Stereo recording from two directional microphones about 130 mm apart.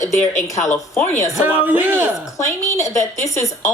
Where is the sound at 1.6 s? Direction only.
15° right (ahead or behind).